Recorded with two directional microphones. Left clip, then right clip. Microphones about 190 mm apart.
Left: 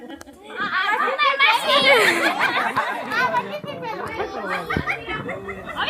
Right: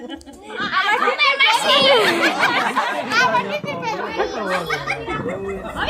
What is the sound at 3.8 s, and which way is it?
Children playing, 10° right (ahead or behind).